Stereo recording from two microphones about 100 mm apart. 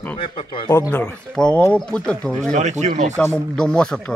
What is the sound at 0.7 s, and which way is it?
Speech, 30° left (ahead or behind).